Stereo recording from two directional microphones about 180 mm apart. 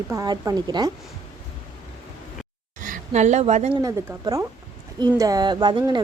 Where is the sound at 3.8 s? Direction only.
20° right (ahead or behind).